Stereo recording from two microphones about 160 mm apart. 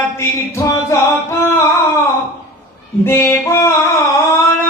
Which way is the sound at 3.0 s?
15° left (ahead or behind).